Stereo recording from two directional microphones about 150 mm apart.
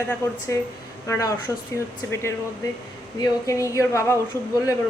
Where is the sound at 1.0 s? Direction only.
20° left (ahead or behind).